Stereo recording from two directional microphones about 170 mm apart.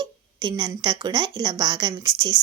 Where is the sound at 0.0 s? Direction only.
25° right (ahead or behind).